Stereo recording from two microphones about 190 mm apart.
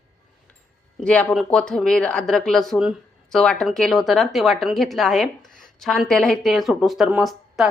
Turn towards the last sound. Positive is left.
turn(degrees=0)  # may be behind; listen again after turning